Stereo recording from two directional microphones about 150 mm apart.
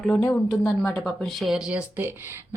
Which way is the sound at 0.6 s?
5° left (ahead or behind).